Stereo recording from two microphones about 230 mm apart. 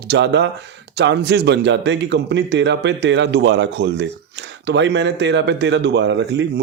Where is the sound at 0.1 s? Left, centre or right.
Right.